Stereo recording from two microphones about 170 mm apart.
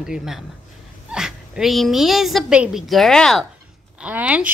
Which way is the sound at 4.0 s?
5° right (ahead or behind).